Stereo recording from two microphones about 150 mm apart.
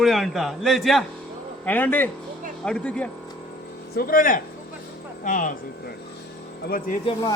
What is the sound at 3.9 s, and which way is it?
Speech, 75° left (ahead or behind).